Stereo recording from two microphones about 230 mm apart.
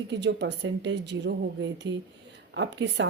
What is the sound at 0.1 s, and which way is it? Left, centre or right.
A woman's voice, right.